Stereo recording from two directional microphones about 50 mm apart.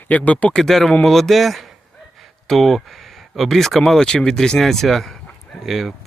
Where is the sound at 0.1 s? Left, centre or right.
Left.